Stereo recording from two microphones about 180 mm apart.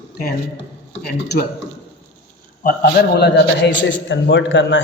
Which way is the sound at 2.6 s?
50° left (ahead or behind).